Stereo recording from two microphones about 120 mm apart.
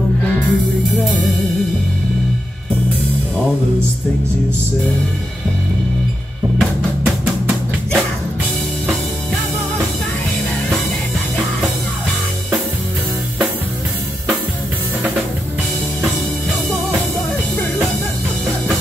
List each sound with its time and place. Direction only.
0.2 s music: 15° left (ahead or behind)
6.6 s music: centre (ahead or behind)